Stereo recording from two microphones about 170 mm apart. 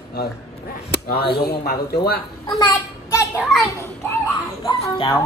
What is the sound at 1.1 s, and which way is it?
Speech, 70° left (ahead or behind).